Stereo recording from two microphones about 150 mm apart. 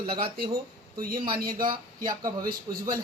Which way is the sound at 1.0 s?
75° right (ahead or behind).